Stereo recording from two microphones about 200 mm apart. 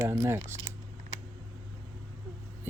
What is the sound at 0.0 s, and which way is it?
Speech, 10° right (ahead or behind).